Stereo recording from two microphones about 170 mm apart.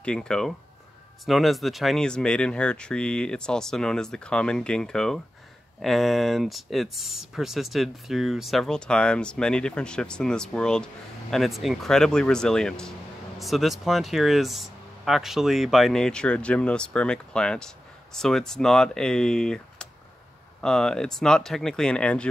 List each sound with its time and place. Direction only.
0.0 s speech: 5° left (ahead or behind)